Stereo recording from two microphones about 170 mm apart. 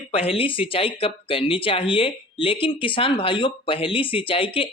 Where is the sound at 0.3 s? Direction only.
30° left (ahead or behind).